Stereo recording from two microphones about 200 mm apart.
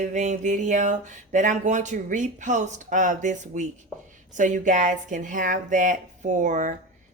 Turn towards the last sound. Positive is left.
turn(degrees=-40)  # may be behind; listen again after turning